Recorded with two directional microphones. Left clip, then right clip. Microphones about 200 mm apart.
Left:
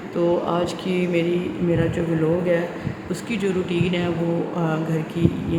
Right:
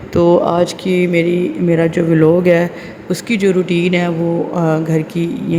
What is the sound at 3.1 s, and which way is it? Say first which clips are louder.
Speech: right 10 dB; 35° right (ahead or behind).